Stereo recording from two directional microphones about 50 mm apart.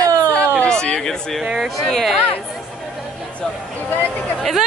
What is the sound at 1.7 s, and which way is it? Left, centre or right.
Speech, centre.